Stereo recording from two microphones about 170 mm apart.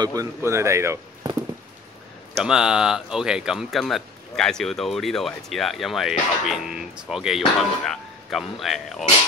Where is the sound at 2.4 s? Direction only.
5° right (ahead or behind).